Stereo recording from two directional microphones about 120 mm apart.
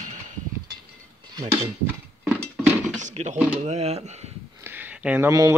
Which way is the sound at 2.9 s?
80° right.